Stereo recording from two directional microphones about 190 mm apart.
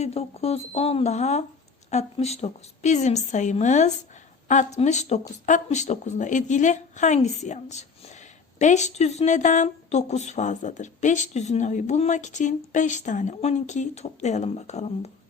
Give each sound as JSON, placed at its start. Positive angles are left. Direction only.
{"t": 0.0, "sound": "speech", "side_deg": 35}